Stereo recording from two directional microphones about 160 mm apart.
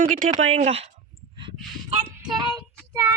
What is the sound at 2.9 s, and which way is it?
Child singing, 20° right (ahead or behind).